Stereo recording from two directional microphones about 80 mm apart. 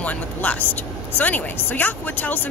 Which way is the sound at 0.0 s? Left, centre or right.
Centre.